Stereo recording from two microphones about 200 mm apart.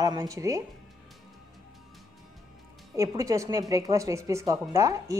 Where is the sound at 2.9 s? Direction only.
15° right (ahead or behind).